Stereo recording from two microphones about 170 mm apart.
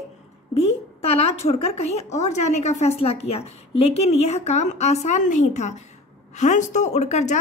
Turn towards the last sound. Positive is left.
turn(degrees=40)  # may be behind; listen again after turning